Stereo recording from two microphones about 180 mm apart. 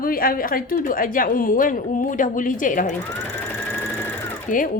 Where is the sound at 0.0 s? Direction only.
55° left (ahead or behind).